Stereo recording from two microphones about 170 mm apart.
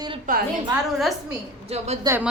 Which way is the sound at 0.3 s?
50° right (ahead or behind).